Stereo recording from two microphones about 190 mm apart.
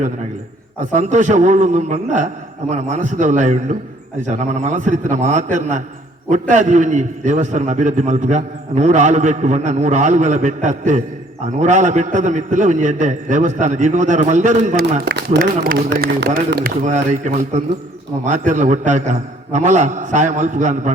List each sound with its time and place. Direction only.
0.9 s a man's voice: 40° right (ahead or behind)
15.0 s speech: 60° right (ahead or behind)
16.8 s a man's voice: 40° right (ahead or behind)